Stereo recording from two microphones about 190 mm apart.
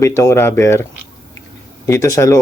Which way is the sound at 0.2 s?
15° left (ahead or behind).